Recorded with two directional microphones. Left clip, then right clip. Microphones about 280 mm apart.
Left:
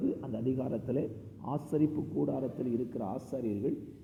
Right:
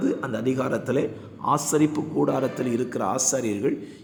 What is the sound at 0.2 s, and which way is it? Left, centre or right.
Speech, right.